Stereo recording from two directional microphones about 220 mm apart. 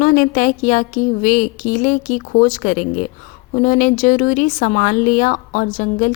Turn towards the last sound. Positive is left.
turn(degrees=35)  # may be behind; listen again after turning